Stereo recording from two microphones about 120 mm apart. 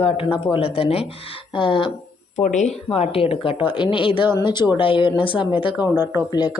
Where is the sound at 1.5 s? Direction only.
40° left (ahead or behind).